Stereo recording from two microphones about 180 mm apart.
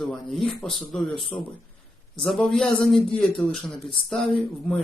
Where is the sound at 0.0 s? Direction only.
Centre (ahead or behind).